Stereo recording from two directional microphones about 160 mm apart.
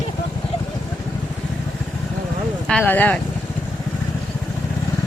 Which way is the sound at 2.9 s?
10° left (ahead or behind).